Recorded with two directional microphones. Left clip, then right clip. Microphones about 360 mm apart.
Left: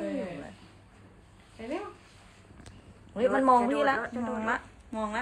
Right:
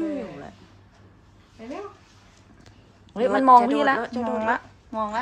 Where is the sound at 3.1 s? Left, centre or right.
Right.